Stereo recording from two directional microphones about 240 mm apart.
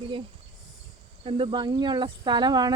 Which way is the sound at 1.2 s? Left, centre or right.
Right.